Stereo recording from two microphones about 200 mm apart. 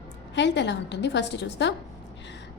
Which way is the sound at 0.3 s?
60° left (ahead or behind).